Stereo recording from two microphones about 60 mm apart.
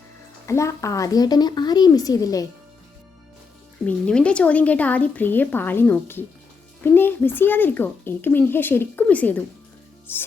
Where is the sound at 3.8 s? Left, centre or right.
Centre; by 9.0 s left.